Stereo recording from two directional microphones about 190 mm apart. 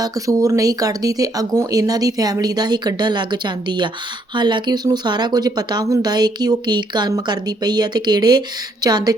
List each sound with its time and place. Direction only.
0.0 s speech: 15° right (ahead or behind)